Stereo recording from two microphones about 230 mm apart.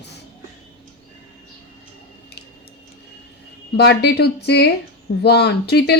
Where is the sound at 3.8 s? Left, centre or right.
Left.